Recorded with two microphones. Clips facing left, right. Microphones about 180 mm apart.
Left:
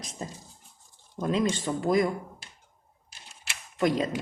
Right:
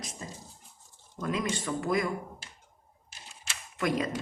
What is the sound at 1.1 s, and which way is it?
Speech, 30° left (ahead or behind).